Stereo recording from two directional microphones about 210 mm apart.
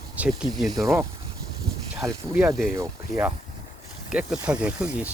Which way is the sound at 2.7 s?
10° right (ahead or behind).